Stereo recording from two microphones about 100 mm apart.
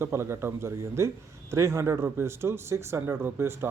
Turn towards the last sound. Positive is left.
turn(degrees=-25)  # may be behind; listen again after turning